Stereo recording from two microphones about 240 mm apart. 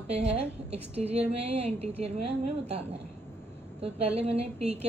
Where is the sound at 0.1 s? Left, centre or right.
Right.